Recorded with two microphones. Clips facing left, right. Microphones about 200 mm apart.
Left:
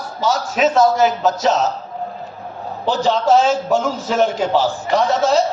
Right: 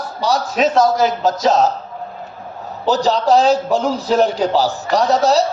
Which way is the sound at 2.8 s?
40° right (ahead or behind).